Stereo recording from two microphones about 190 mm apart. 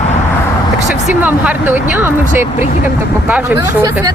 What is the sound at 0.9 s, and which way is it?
Speech, 5° right (ahead or behind).